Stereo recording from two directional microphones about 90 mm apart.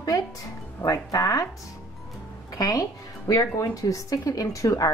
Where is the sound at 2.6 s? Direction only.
40° left (ahead or behind).